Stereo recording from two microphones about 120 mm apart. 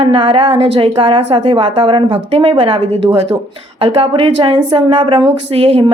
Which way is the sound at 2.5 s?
45° right (ahead or behind).